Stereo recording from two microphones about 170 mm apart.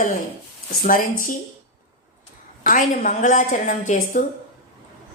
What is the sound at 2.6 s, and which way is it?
A woman's voice, 50° left (ahead or behind).